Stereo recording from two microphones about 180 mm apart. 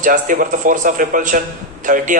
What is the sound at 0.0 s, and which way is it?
A man's voice, 45° right (ahead or behind).